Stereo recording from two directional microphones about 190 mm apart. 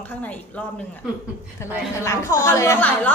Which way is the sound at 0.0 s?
10° left (ahead or behind).